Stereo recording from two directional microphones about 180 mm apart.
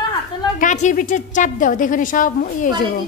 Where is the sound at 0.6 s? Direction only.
45° left (ahead or behind).